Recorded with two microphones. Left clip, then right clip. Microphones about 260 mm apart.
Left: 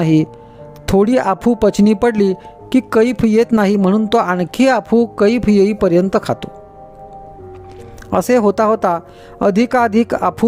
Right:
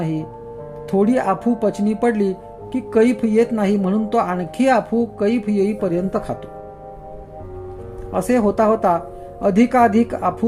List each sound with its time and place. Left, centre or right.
0.0 s speech: left
8.1 s speech: left